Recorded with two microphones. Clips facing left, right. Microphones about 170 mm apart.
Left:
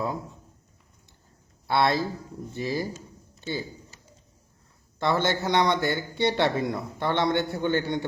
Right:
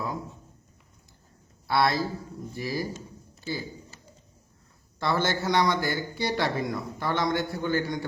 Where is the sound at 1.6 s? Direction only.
25° left (ahead or behind).